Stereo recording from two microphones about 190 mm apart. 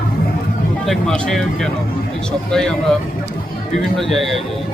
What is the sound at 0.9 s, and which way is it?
Speech, 5° left (ahead or behind).